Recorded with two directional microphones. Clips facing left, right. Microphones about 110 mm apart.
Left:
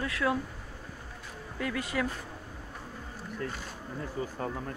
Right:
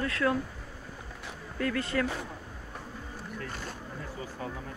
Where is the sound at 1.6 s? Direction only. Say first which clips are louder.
Right 2 dB; 10° left (ahead or behind).